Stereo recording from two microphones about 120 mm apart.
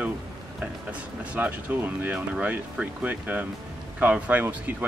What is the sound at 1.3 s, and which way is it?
Speech, 15° right (ahead or behind).